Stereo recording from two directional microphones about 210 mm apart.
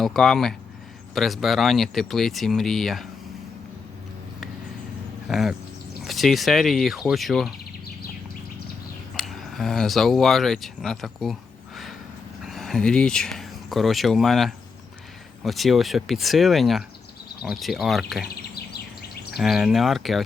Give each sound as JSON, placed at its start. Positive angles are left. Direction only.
{"t": 0.0, "sound": "speech", "side_deg": 0}
{"t": 5.3, "sound": "speech", "side_deg": 0}
{"t": 9.1, "sound": "speech", "side_deg": 0}
{"t": 12.5, "sound": "speech", "side_deg": 0}
{"t": 18.5, "sound": "bird vocalization", "side_deg": 50}
{"t": 19.4, "sound": "speech", "side_deg": 0}